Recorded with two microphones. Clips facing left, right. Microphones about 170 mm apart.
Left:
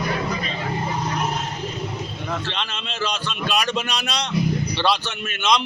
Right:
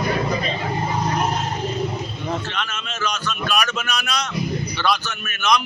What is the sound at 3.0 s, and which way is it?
A man's voice, 30° left (ahead or behind).